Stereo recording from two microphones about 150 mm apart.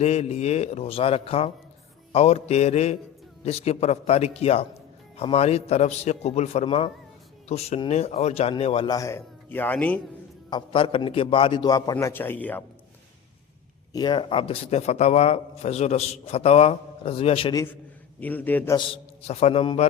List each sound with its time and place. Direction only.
0.0 s a man's voice: 45° left (ahead or behind)
6.7 s speech: 35° left (ahead or behind)
8.9 s a man's voice: 20° left (ahead or behind)
10.5 s a man's voice: 35° left (ahead or behind); by 12.6 s 10° left (ahead or behind)
13.9 s a man's voice: 30° left (ahead or behind)
18.2 s a man's voice: 10° left (ahead or behind)
18.9 s a man's voice: 45° left (ahead or behind)